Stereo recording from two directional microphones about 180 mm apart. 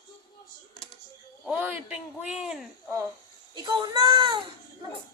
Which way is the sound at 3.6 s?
25° right (ahead or behind).